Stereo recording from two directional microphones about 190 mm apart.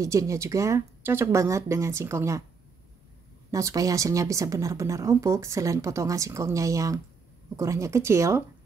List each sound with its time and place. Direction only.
0.0 s speech: 15° right (ahead or behind)
3.5 s speech: 15° right (ahead or behind)